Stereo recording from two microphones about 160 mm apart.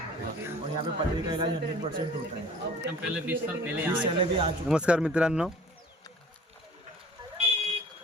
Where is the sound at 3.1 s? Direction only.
10° right (ahead or behind).